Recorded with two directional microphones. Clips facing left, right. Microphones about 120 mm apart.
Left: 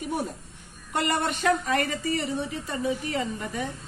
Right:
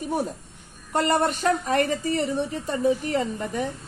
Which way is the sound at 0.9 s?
40° right (ahead or behind).